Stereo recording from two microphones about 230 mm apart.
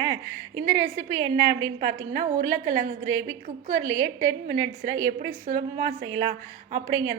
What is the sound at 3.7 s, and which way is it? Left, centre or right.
Speech, centre.